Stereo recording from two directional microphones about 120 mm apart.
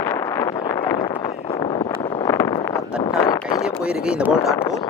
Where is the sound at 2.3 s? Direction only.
25° left (ahead or behind).